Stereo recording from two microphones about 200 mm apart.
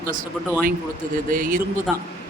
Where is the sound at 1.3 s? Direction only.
45° right (ahead or behind).